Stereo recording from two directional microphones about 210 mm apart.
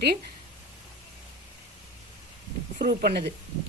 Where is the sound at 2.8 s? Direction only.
45° right (ahead or behind).